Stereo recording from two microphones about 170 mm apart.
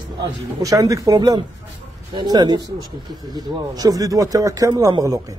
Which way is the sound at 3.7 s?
20° right (ahead or behind).